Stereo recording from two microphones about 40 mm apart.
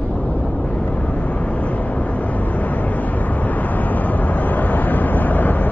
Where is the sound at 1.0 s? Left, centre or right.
Left.